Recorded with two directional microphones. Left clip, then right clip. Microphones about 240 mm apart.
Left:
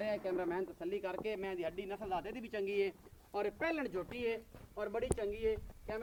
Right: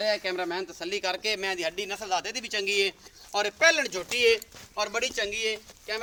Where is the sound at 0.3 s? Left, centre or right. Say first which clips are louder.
Right 7 dB; right.